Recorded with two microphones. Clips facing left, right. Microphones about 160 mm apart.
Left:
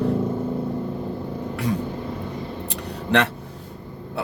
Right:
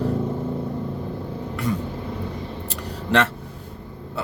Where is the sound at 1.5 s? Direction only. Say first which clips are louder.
Even; 65° left (ahead or behind).